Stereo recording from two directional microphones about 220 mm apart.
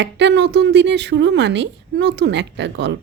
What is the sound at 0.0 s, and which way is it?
Speech, 50° right (ahead or behind).